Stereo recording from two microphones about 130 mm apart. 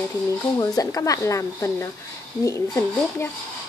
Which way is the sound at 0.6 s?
30° left (ahead or behind).